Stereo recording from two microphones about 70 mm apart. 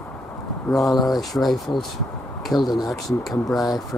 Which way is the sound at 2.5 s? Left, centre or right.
Left.